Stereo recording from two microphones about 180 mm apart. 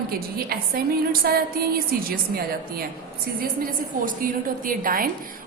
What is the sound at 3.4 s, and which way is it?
A woman's voice, 55° right (ahead or behind).